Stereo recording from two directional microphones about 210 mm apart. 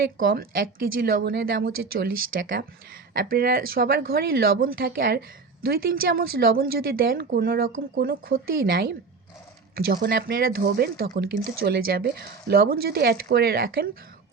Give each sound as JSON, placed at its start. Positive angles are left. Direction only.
{"t": 0.2, "sound": "speech", "side_deg": -45}